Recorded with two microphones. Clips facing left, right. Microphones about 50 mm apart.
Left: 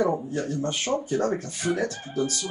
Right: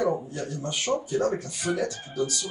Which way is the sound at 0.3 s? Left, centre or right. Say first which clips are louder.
Left 4 dB; left.